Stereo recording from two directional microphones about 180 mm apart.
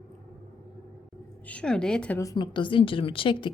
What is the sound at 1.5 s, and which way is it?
Speech, 5° left (ahead or behind).